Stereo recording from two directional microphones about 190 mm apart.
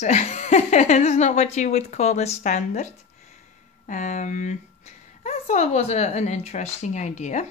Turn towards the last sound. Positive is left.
turn(degrees=40)  # may be behind; listen again after turning